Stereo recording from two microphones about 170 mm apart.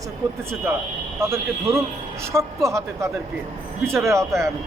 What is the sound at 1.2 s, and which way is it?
Speech, 15° right (ahead or behind).